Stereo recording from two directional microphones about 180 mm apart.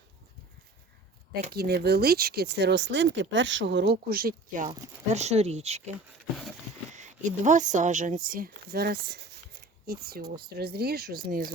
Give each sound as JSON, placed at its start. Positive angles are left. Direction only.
{"t": 1.5, "sound": "speech", "side_deg": -60}
{"t": 3.9, "sound": "speech", "side_deg": -55}
{"t": 5.0, "sound": "speech", "side_deg": -40}
{"t": 6.9, "sound": "speech", "side_deg": -40}